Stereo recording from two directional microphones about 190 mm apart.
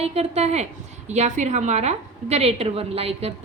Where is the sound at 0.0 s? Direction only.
35° right (ahead or behind).